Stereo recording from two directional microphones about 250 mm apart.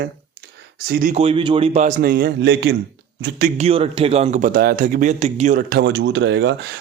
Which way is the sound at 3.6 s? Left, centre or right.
Right.